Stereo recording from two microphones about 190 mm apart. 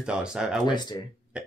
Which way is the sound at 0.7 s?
20° left (ahead or behind).